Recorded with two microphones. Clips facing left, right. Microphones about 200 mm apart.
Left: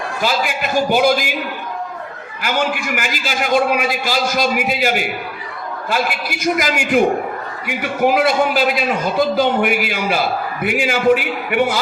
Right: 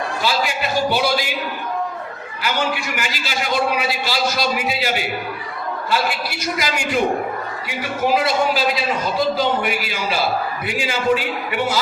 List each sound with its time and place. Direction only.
0.2 s a man's voice: 45° left (ahead or behind)
2.4 s a man's voice: 50° left (ahead or behind)